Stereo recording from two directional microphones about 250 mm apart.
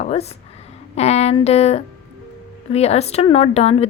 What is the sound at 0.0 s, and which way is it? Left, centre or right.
A woman's voice, left.